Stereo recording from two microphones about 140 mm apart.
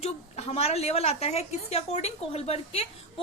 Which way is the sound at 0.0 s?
50° left (ahead or behind).